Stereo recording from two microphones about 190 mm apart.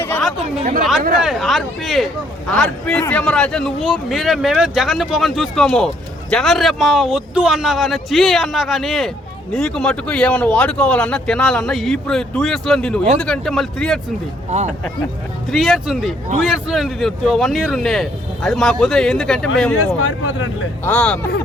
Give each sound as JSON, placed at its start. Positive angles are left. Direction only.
{"t": 0.2, "sound": "chatter", "side_deg": 0}
{"t": 1.2, "sound": "a man's voice", "side_deg": 0}
{"t": 15.5, "sound": "a man's voice", "side_deg": 0}
{"t": 20.0, "sound": "speech", "side_deg": 90}
{"t": 20.8, "sound": "speech", "side_deg": 5}